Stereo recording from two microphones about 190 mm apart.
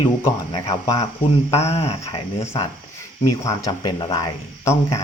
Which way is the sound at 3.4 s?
20° left (ahead or behind).